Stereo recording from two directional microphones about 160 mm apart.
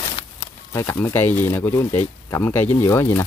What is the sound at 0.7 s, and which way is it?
Speech, 15° left (ahead or behind).